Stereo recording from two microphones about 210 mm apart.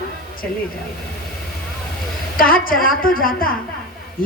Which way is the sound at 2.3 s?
45° left (ahead or behind).